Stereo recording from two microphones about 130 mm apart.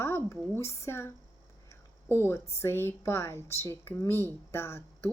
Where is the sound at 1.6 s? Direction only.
20° left (ahead or behind).